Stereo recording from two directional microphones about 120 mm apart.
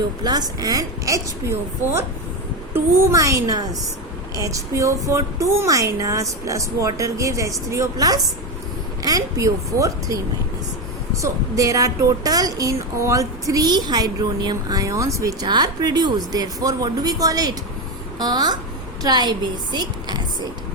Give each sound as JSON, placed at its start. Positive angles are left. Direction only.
{"t": 0.2, "sound": "a woman's voice", "side_deg": -35}